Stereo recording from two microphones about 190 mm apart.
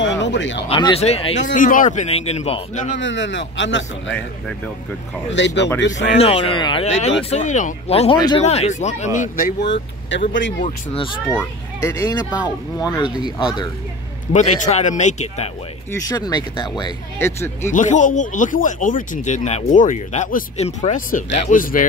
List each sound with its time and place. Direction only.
0.0 s a sound: 70° left (ahead or behind)
0.7 s speech: 25° left (ahead or behind)
3.0 s a man's voice: 75° left (ahead or behind)
5.3 s a man's voice: 65° left (ahead or behind)
6.1 s speech: 30° left (ahead or behind)
9.6 s speech: 75° left (ahead or behind)
10.6 s speech: 30° left (ahead or behind)
11.2 s a child's voice: 15° left (ahead or behind)
14.3 s speech: 40° left (ahead or behind)
15.9 s a child's voice: 20° left (ahead or behind)
17.6 s speech: 40° left (ahead or behind)